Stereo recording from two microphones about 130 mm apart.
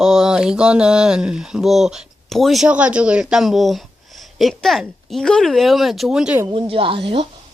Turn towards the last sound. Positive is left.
turn(degrees=-45)  # may be behind; listen again after turning